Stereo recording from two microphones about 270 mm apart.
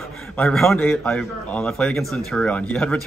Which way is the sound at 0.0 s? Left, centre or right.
Centre.